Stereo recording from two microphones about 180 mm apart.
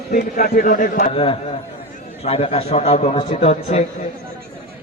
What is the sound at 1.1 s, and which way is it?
A man's voice, 30° left (ahead or behind).